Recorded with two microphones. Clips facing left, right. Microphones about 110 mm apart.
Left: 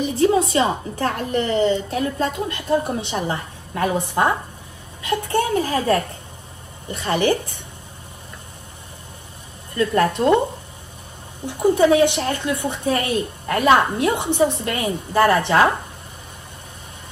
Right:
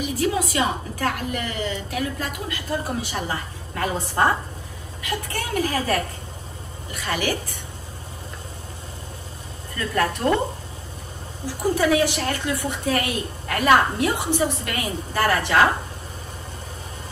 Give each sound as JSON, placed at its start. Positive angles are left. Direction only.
{"t": 0.0, "sound": "a woman's voice", "side_deg": 25}
{"t": 9.8, "sound": "a woman's voice", "side_deg": 20}
{"t": 11.4, "sound": "a woman's voice", "side_deg": 20}